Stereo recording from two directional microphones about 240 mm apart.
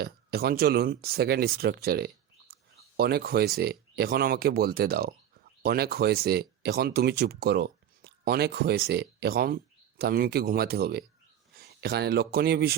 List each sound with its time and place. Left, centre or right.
0.0 s speech: right